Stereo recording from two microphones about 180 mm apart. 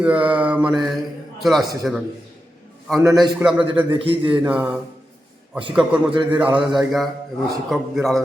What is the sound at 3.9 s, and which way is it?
Speech, 30° right (ahead or behind).